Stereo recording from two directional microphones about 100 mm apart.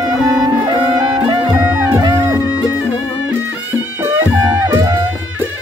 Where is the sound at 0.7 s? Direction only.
45° right (ahead or behind).